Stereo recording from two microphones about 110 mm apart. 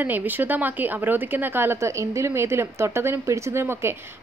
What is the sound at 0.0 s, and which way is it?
A woman's voice, 15° right (ahead or behind).